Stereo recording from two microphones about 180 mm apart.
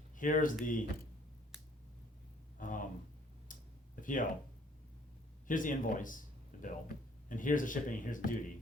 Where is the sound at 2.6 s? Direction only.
50° left (ahead or behind).